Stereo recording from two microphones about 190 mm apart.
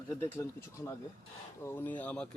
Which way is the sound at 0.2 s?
10° left (ahead or behind).